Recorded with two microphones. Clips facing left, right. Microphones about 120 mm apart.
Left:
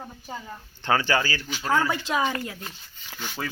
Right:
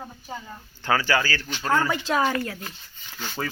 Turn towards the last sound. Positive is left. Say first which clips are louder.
# right 2 dB
turn(degrees=5)  # may be behind; listen again after turning